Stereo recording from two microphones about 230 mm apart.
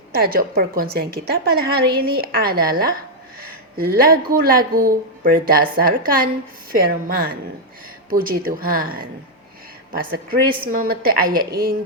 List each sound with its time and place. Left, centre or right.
0.1 s a woman's voice: right
10.1 s a woman's voice: right